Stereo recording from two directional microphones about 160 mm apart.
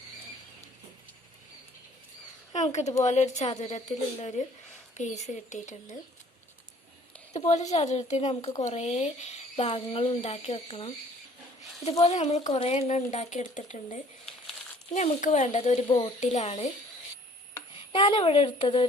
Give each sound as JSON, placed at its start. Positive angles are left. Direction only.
{"t": 2.5, "sound": "speech", "side_deg": 45}
{"t": 7.3, "sound": "speech", "side_deg": 45}
{"t": 12.0, "sound": "speech", "side_deg": 45}
{"t": 15.9, "sound": "speech", "side_deg": 30}
{"t": 16.2, "sound": "speech", "side_deg": 45}
{"t": 17.9, "sound": "speech", "side_deg": 35}